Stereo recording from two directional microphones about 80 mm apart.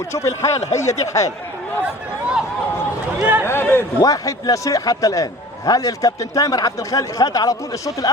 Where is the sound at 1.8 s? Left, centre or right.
Centre.